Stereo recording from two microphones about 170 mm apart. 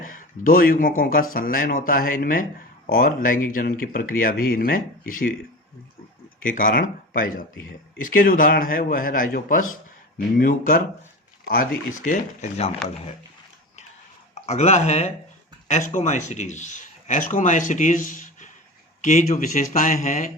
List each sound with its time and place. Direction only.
0.0 s speech: 55° left (ahead or behind)
6.4 s speech: 55° left (ahead or behind)
14.4 s speech: 40° left (ahead or behind)